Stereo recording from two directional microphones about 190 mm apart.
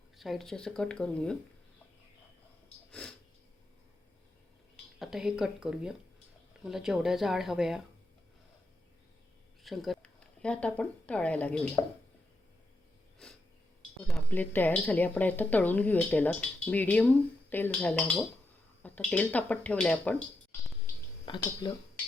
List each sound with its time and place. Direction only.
0.2 s speech: centre (ahead or behind)
2.9 s sniff: 5° left (ahead or behind)
4.9 s speech: 5° right (ahead or behind)
9.6 s speech: centre (ahead or behind)
13.2 s a sound: 5° left (ahead or behind)
14.0 s speech: 5° left (ahead or behind)
21.2 s speech: 25° left (ahead or behind)